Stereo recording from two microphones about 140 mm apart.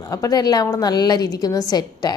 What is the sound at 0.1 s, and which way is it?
A woman's voice, 25° left (ahead or behind).